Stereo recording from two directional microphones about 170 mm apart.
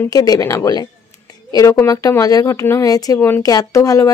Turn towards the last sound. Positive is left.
turn(degrees=20)  # may be behind; listen again after turning